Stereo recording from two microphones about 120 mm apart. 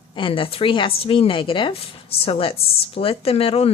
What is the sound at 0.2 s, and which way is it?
Speech, 45° left (ahead or behind).